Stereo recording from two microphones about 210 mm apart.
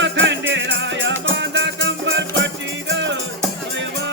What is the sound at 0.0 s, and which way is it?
Music, 60° right (ahead or behind).